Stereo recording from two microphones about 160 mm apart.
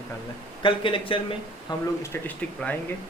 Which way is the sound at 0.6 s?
30° left (ahead or behind).